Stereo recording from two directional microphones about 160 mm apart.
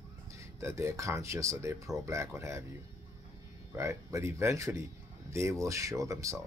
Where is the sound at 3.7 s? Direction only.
15° right (ahead or behind).